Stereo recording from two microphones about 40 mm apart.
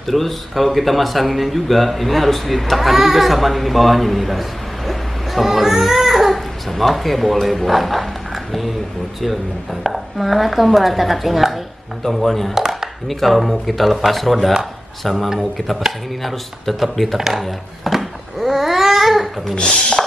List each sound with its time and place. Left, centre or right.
0.0 s speech: centre
9.8 s speech: centre
12.5 s a sound: centre
13.1 s speech: centre
17.4 s babbling: centre
19.5 s speech: centre